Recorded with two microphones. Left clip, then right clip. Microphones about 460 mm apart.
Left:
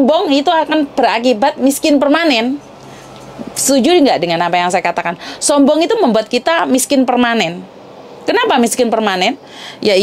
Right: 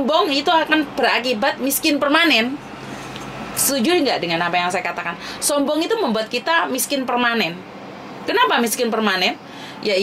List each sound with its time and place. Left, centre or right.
0.0 s a woman's voice: left
3.6 s a woman's voice: left